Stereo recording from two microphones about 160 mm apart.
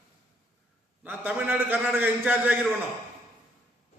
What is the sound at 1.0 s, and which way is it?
A man's voice, 10° right (ahead or behind).